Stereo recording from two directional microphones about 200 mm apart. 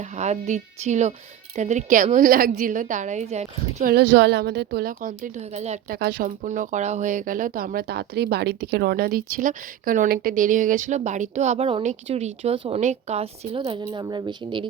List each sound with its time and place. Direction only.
0.2 s speech: 35° right (ahead or behind)
3.9 s a woman's voice: 60° right (ahead or behind); by 6.0 s 35° right (ahead or behind)
6.0 s speech: 50° right (ahead or behind); by 13.6 s 30° right (ahead or behind)
13.6 s a woman's voice: 20° right (ahead or behind)